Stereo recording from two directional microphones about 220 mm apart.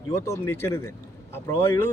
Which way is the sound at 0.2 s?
10° left (ahead or behind).